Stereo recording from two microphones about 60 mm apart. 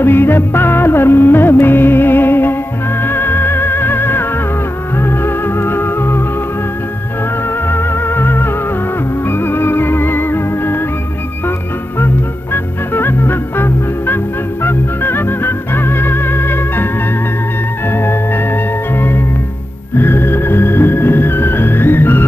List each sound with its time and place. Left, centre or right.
0.0 s music: left
7.7 s music: left
12.9 s music: left
17.9 s music: left